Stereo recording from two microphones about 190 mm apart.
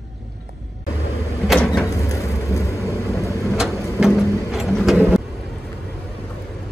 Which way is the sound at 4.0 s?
Centre (ahead or behind).